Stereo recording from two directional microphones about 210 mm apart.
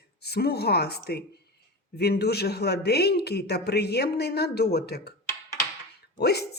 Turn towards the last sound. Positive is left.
turn(degrees=50)  # may be behind; listen again after turning